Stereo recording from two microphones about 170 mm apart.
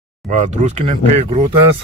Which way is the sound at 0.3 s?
45° right (ahead or behind).